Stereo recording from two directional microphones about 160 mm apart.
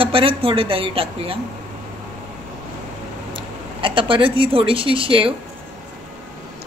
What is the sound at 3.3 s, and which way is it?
Speech, 30° right (ahead or behind).